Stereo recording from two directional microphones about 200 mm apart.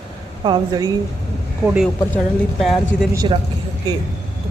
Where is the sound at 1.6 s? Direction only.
5° right (ahead or behind).